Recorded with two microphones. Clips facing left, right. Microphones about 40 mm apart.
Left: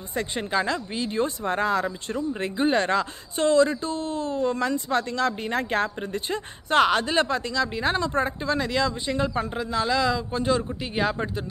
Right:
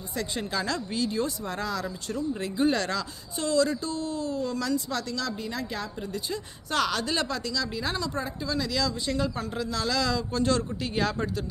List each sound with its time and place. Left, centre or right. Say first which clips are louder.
0.1 s speech: left 5 dB; left